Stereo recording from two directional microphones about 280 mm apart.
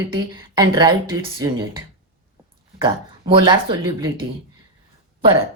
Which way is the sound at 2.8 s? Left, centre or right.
Centre.